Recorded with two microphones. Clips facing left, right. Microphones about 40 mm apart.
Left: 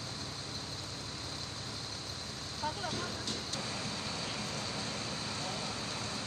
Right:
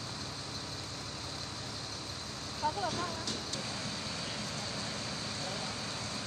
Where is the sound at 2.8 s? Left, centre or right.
Right.